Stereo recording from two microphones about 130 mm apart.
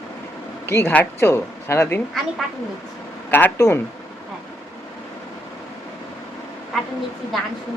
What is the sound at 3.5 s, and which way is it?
Speech, 25° left (ahead or behind).